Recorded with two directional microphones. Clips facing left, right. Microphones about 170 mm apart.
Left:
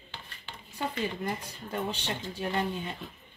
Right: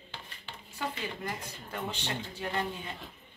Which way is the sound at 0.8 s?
30° left (ahead or behind).